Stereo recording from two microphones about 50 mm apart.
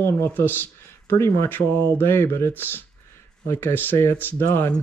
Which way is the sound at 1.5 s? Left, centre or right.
Left.